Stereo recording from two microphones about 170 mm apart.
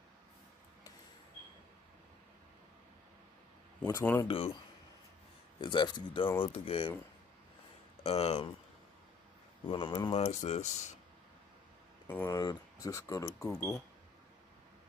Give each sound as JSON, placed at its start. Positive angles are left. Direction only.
{"t": 4.0, "sound": "speech", "side_deg": 10}
{"t": 5.6, "sound": "speech", "side_deg": 25}
{"t": 8.0, "sound": "speech", "side_deg": 35}
{"t": 9.7, "sound": "speech", "side_deg": 30}
{"t": 12.1, "sound": "speech", "side_deg": 10}